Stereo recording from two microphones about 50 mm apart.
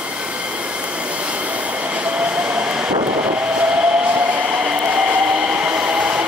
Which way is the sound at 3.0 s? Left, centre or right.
Right.